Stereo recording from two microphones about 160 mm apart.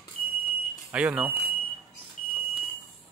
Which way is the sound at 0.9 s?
10° right (ahead or behind).